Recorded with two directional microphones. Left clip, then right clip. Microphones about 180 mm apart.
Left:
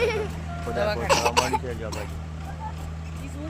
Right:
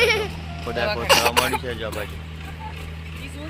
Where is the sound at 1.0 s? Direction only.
20° right (ahead or behind).